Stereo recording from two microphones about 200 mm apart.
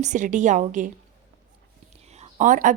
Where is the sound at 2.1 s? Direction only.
35° right (ahead or behind).